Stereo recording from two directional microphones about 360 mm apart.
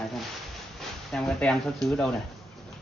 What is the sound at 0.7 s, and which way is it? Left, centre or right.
Speech, centre.